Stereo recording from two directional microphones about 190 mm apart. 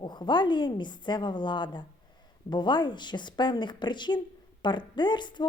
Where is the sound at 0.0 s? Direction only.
25° left (ahead or behind).